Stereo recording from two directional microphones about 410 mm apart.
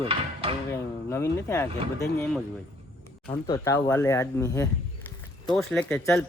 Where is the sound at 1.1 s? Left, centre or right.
Centre.